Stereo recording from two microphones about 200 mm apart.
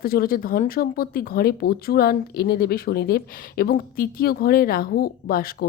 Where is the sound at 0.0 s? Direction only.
50° left (ahead or behind).